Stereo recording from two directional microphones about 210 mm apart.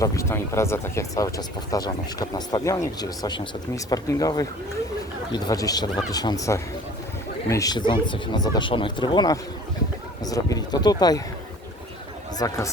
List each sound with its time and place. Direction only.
0.0 s speech: 15° left (ahead or behind)
12.4 s speech: 15° left (ahead or behind)